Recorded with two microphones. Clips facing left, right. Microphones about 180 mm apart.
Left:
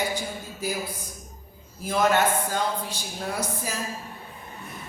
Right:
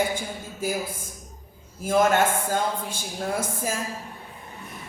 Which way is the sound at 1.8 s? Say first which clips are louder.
Right 2 dB; 50° right (ahead or behind).